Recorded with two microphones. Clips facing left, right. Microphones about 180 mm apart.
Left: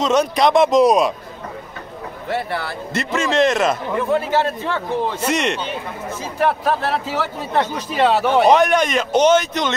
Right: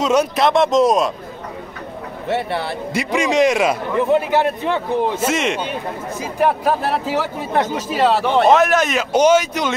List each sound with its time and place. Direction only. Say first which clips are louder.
0.0 s speech: even; 10° right (ahead or behind)
2.2 s speech: right 2 dB; 25° right (ahead or behind)
2.9 s a man's voice: right 2 dB; 10° right (ahead or behind)
5.2 s a man's voice: right 1 dB; 5° right (ahead or behind)